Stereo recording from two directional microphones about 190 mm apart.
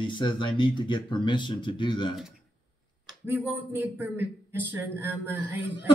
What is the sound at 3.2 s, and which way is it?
Speech, 10° right (ahead or behind).